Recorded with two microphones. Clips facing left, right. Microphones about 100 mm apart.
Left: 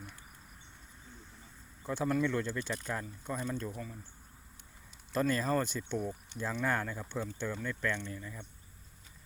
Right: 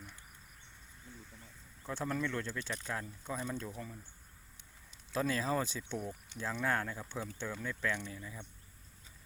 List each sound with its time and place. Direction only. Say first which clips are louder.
1.8 s speech: left 5 dB; 5° left (ahead or behind)
5.1 s speech: left 3 dB; centre (ahead or behind)